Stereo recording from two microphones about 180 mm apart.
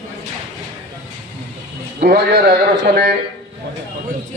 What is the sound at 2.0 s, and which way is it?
A man's voice, 60° right (ahead or behind).